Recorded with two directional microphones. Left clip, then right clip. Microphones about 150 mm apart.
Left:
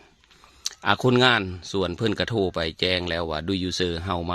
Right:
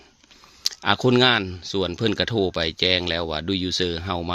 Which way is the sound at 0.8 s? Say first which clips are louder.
Right 1 dB; 15° right (ahead or behind).